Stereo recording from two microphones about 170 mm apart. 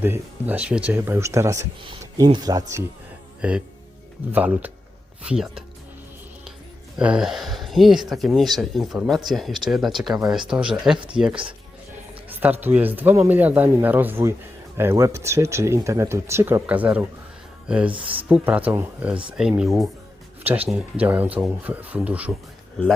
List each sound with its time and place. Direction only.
0.0 s speech: 10° right (ahead or behind)
3.4 s speech: 10° right (ahead or behind)
6.9 s speech: 5° right (ahead or behind)
10.9 s speech: 30° right (ahead or behind)
12.3 s speech: 10° right (ahead or behind)
17.9 s speech: 30° right (ahead or behind)
18.3 s speech: 10° right (ahead or behind)
21.0 s speech: 10° right (ahead or behind)